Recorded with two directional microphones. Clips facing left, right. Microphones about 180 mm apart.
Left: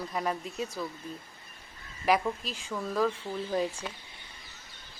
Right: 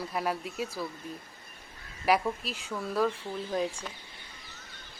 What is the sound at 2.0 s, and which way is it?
A woman's voice, 5° right (ahead or behind).